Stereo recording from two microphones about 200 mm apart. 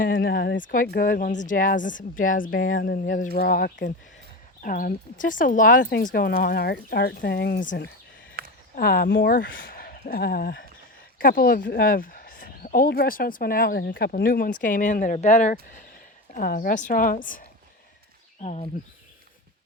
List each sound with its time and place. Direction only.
0.2 s speech: 55° left (ahead or behind)
18.4 s speech: 30° left (ahead or behind)